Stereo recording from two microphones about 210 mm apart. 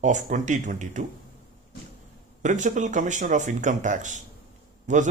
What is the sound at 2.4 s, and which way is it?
Speech, 35° right (ahead or behind).